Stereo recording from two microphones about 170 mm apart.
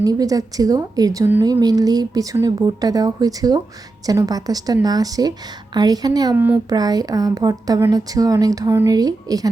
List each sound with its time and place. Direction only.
0.0 s speech: 20° right (ahead or behind)
6.3 s child singing: 10° right (ahead or behind)
6.7 s speech: 25° right (ahead or behind)